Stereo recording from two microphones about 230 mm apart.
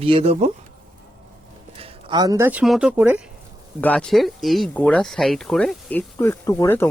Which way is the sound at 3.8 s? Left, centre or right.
Centre.